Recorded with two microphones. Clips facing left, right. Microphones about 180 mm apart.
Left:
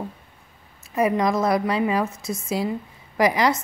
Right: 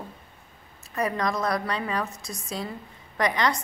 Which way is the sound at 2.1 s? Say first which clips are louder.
Left 8 dB; centre (ahead or behind).